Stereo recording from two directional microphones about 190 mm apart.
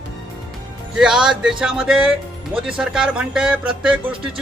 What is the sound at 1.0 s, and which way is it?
Speech, 5° right (ahead or behind).